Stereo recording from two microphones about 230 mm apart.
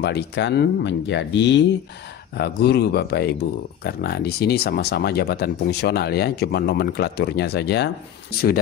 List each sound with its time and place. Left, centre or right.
0.0 s speech: left